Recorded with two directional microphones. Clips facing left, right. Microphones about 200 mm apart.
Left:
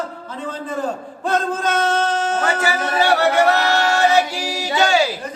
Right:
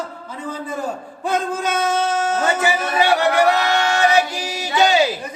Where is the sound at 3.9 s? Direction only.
15° right (ahead or behind).